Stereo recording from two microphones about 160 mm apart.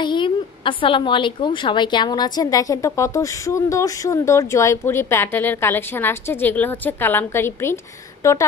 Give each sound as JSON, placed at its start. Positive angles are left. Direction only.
{"t": 0.0, "sound": "a woman's voice", "side_deg": 30}